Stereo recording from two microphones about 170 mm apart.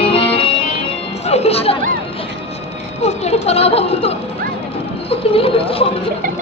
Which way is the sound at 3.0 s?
40° left (ahead or behind).